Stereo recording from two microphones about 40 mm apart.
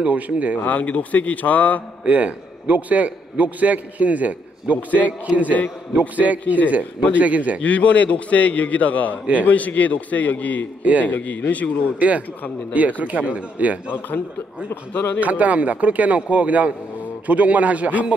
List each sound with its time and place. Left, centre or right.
0.0 s a man's voice: right
0.7 s a man's voice: left
2.0 s a man's voice: right
7.6 s a man's voice: left
9.2 s a man's voice: right
9.5 s a man's voice: left
10.8 s a man's voice: right
11.1 s a man's voice: left
12.0 s a man's voice: right
14.9 s speech: left
15.1 s a man's voice: right